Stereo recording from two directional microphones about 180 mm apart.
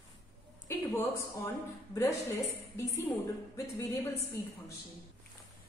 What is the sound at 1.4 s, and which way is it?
A woman's voice, 15° left (ahead or behind).